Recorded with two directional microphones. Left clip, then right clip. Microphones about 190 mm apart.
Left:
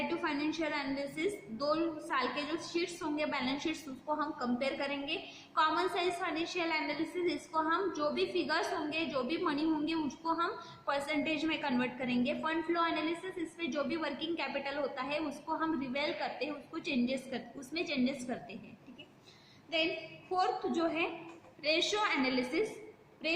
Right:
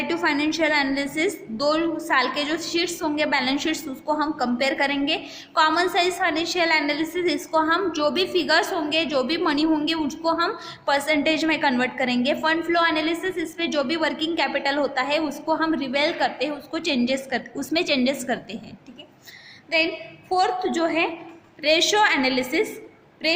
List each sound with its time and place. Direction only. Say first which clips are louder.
0.1 s a woman's voice: right 13 dB; 50° right (ahead or behind)
20.3 s a woman's voice: right 11 dB; 55° right (ahead or behind)